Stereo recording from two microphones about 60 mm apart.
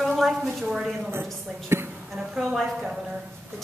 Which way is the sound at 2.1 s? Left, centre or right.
Centre.